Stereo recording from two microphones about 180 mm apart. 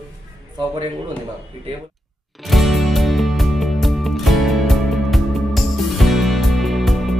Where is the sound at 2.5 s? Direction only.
Centre (ahead or behind).